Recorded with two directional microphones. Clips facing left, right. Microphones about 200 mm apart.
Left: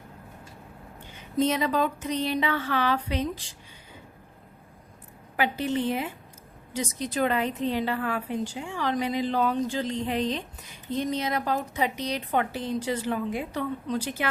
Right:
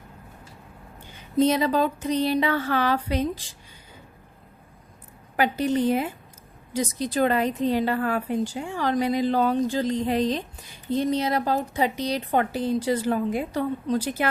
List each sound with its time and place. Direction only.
1.4 s a woman's voice: 35° right (ahead or behind)
5.4 s a woman's voice: 40° right (ahead or behind)